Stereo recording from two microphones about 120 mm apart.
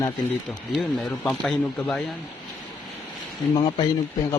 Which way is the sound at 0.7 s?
5° left (ahead or behind).